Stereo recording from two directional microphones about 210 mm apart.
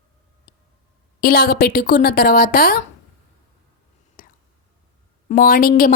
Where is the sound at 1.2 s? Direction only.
45° left (ahead or behind).